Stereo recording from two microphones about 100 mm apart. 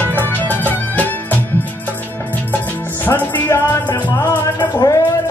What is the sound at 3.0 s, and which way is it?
Music, 20° left (ahead or behind).